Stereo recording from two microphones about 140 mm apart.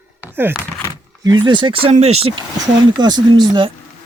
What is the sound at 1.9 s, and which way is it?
Speech, 50° right (ahead or behind).